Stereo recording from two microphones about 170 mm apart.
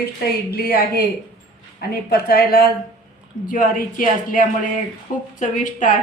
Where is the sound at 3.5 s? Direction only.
55° left (ahead or behind).